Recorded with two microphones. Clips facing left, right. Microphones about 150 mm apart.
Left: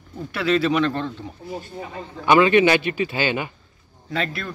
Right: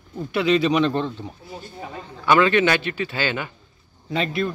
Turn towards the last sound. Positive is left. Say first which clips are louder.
# right 4 dB
turn(degrees=-20)  # may be behind; listen again after turning